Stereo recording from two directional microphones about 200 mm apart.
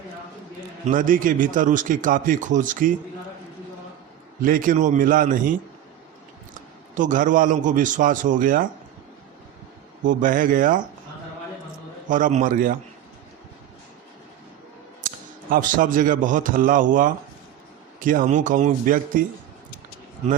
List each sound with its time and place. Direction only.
0.9 s a man's voice: 40° right (ahead or behind)
4.4 s a man's voice: 45° right (ahead or behind)
6.9 s a man's voice: 40° right (ahead or behind)
10.1 s a man's voice: 40° right (ahead or behind)
12.0 s a man's voice: 40° right (ahead or behind)
15.0 s a man's voice: 40° right (ahead or behind)